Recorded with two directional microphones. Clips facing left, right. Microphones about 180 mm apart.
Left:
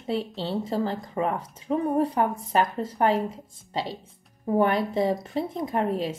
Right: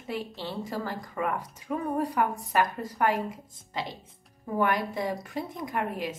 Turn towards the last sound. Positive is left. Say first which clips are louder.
# left 6 dB
turn(degrees=30)  # may be behind; listen again after turning